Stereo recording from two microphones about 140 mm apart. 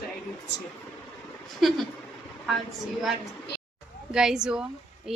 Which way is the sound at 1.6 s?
Centre (ahead or behind).